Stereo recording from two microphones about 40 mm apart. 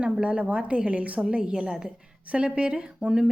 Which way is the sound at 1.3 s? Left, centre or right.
Right.